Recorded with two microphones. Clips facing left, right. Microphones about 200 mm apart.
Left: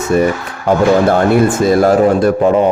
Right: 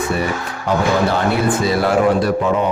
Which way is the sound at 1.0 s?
50° left (ahead or behind).